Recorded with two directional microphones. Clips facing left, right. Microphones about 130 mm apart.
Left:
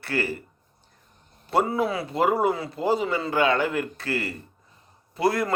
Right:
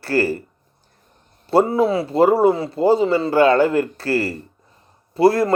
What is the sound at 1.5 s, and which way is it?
Speech, 30° right (ahead or behind).